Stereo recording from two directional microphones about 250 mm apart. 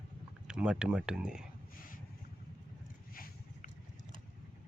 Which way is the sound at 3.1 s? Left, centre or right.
Left.